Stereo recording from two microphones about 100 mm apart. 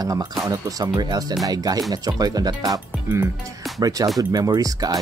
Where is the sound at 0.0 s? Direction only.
40° right (ahead or behind).